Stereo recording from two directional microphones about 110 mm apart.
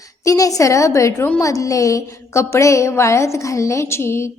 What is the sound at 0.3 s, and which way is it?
A woman's voice, 30° left (ahead or behind).